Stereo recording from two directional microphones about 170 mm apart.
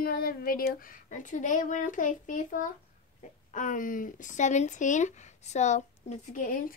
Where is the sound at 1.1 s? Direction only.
50° left (ahead or behind).